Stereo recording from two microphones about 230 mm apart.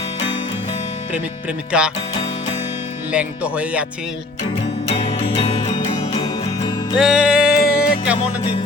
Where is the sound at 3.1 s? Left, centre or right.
Centre.